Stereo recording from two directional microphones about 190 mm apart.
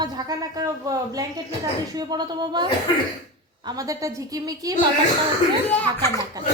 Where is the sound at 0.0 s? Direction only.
20° right (ahead or behind).